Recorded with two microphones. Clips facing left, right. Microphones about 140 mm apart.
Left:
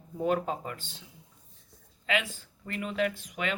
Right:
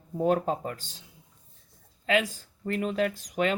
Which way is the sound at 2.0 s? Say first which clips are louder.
Right 5 dB; 40° right (ahead or behind).